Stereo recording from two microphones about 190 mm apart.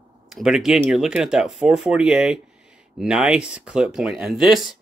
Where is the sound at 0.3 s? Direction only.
Centre (ahead or behind).